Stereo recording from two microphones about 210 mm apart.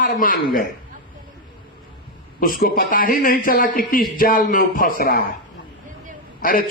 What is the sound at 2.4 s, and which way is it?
A man's voice, 45° left (ahead or behind).